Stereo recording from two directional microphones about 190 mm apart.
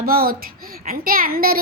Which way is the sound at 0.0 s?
50° right (ahead or behind).